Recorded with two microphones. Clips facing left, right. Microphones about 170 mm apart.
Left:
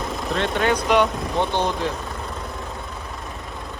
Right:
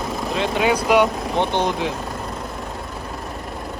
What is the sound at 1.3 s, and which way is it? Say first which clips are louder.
Speech: right 1 dB; 15° right (ahead or behind).